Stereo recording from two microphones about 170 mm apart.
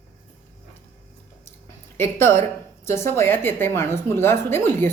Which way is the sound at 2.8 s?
15° left (ahead or behind).